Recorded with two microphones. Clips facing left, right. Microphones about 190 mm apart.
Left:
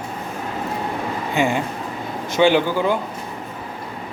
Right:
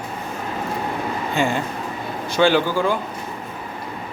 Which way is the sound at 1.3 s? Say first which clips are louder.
Left 2 dB; 15° left (ahead or behind).